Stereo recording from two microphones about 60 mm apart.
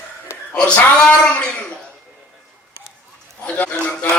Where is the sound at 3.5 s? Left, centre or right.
Centre.